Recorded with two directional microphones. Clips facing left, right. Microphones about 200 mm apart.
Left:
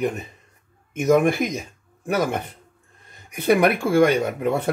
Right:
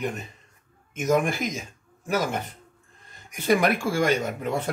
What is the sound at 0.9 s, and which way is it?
Speech, 60° left (ahead or behind).